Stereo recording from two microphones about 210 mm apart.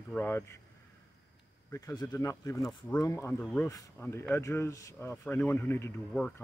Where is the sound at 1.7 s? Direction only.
15° left (ahead or behind).